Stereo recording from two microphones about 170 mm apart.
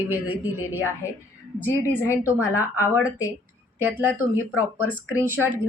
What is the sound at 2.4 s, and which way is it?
Speech, 15° left (ahead or behind).